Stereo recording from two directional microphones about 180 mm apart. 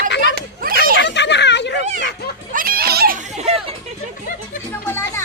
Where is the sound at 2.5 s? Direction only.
55° right (ahead or behind).